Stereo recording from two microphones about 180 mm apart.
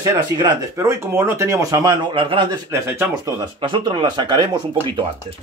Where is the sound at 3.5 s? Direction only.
25° right (ahead or behind).